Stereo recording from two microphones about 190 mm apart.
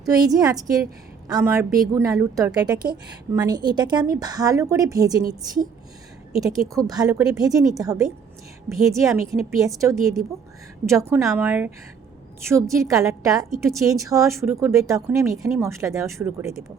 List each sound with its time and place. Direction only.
0.0 s a woman's voice: 20° right (ahead or behind)
6.4 s a woman's voice: 20° right (ahead or behind)